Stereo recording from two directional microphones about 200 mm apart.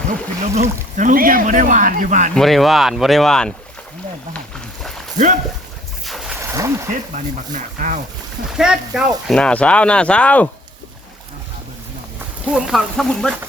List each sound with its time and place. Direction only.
0.1 s speech: 35° right (ahead or behind)
2.3 s speech: centre (ahead or behind)
4.8 s a sound: centre (ahead or behind)
6.1 s a sound: centre (ahead or behind)
6.4 s splash: 15° right (ahead or behind)
7.1 s speech: 40° right (ahead or behind)
8.4 s speech: 5° right (ahead or behind)
12.5 s speech: centre (ahead or behind)